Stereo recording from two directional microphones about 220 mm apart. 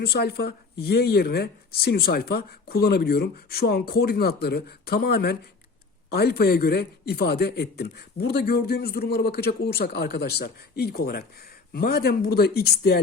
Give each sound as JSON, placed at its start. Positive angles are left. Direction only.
{"t": 0.0, "sound": "a man's voice", "side_deg": 45}